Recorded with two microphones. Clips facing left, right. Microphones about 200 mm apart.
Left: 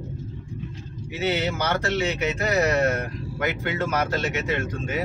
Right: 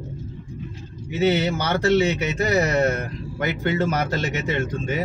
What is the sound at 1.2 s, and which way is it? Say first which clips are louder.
Speech: right 4 dB; 30° right (ahead or behind).